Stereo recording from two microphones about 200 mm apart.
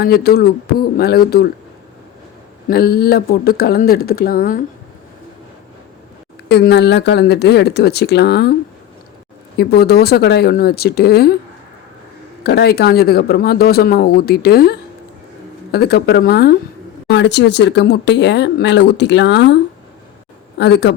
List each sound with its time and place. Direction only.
0.0 s speech: 50° left (ahead or behind)
2.6 s speech: 50° left (ahead or behind)
6.5 s speech: 55° left (ahead or behind)
9.6 s speech: 55° left (ahead or behind)
12.4 s speech: 55° left (ahead or behind)
20.6 s speech: 55° left (ahead or behind)